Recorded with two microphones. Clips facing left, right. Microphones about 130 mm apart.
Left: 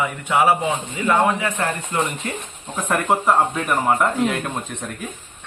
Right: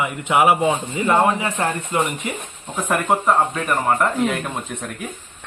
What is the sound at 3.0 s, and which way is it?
A woman's voice, centre (ahead or behind).